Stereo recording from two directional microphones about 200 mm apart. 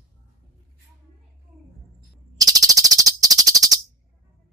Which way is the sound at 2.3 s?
20° right (ahead or behind).